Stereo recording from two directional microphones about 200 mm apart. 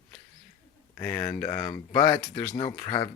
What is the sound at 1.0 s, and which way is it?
Speech, 10° left (ahead or behind).